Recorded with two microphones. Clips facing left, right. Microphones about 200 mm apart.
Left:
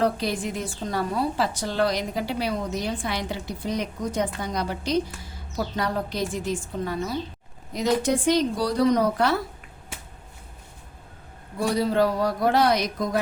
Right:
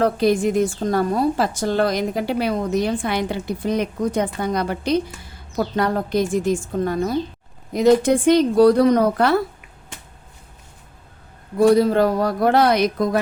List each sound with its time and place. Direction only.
0.0 s a woman's voice: 50° right (ahead or behind)
11.6 s a woman's voice: 50° right (ahead or behind)